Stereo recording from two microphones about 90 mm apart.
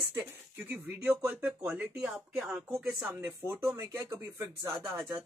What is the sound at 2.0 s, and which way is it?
Speech, 10° right (ahead or behind).